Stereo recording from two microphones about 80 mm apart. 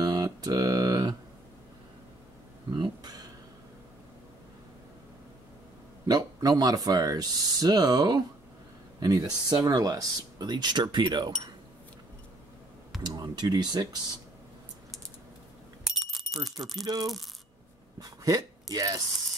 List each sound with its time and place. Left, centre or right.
0.0 s a sound: right
2.8 s a sound: right
6.0 s speech: right
10.5 s speech: right
13.0 s speech: right
15.8 s bicycle bell: centre
16.8 s speech: right